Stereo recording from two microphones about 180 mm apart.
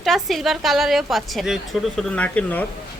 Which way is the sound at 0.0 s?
Centre (ahead or behind).